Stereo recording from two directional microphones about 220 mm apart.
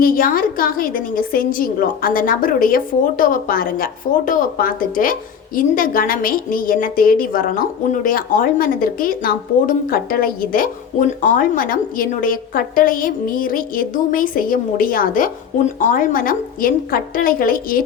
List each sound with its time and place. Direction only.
0.0 s a woman's voice: 40° left (ahead or behind)